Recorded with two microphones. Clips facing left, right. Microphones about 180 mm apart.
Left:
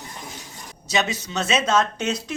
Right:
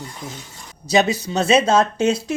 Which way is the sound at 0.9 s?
35° right (ahead or behind).